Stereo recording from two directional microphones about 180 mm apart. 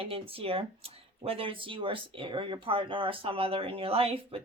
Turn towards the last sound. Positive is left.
turn(degrees=-35)  # may be behind; listen again after turning